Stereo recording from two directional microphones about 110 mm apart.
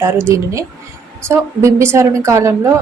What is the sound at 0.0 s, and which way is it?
A woman's voice, 25° right (ahead or behind).